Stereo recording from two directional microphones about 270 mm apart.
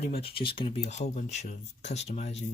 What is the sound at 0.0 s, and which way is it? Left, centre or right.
Speech, left.